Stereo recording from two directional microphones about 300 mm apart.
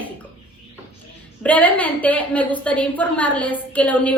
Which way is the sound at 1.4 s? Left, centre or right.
Centre.